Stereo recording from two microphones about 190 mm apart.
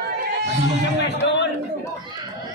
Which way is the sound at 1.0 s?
65° left (ahead or behind).